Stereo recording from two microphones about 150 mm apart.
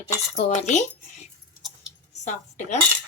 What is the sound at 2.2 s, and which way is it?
Speech, 50° left (ahead or behind).